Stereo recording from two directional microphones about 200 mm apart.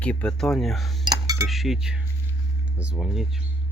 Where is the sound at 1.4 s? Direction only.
Centre (ahead or behind).